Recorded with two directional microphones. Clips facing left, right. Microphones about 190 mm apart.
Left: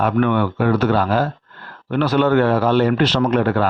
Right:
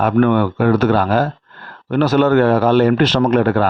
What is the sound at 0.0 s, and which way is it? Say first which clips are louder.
Speech: right 3 dB; 45° right (ahead or behind).